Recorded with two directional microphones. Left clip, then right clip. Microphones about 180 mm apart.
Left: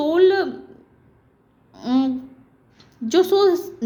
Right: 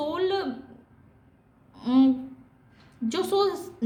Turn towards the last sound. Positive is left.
turn(degrees=40)  # may be behind; listen again after turning